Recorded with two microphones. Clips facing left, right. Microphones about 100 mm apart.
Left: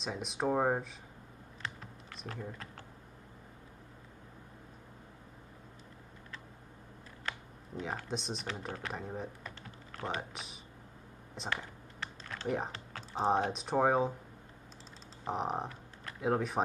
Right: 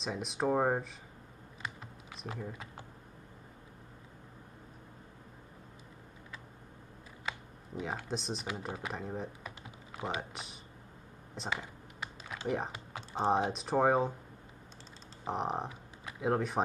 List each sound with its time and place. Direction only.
0.0 s speech: centre (ahead or behind)
1.6 s typing: 10° right (ahead or behind)
7.2 s computer keyboard: 5° right (ahead or behind)
8.5 s speech: 5° right (ahead or behind)
9.4 s typing: 10° right (ahead or behind)
13.1 s speech: centre (ahead or behind)
15.2 s speech: centre (ahead or behind)